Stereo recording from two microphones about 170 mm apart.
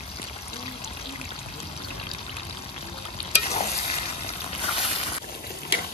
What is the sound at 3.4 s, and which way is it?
Stir, 40° left (ahead or behind).